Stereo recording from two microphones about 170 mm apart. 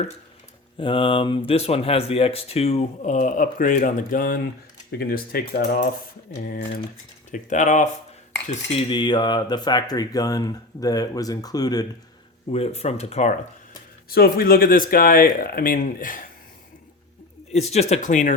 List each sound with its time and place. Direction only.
0.8 s speech: 30° left (ahead or behind); by 4.4 s 55° left (ahead or behind)
4.9 s speech: 65° left (ahead or behind)
7.3 s speech: 45° left (ahead or behind)
8.9 s speech: 25° left (ahead or behind)
12.5 s speech: 35° left (ahead or behind)
14.1 s speech: 60° left (ahead or behind)
17.5 s speech: 40° left (ahead or behind)